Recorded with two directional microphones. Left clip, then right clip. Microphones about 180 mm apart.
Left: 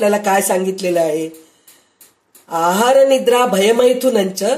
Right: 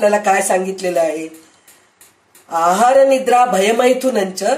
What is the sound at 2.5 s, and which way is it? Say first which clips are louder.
Speech: right 1 dB; 45° left (ahead or behind).